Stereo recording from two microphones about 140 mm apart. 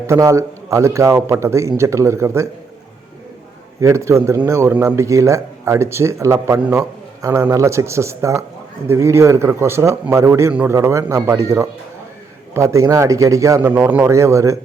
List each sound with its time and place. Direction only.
0.1 s speech: 25° right (ahead or behind)
3.8 s a man's voice: 20° right (ahead or behind)
10.8 s speech: 20° right (ahead or behind)
13.7 s speech: 10° right (ahead or behind)